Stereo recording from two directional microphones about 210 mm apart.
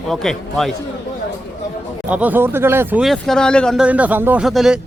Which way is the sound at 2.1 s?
10° right (ahead or behind).